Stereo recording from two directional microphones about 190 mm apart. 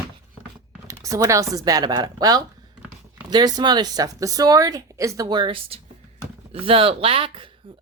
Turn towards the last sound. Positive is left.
turn(degrees=-30)  # may be behind; listen again after turning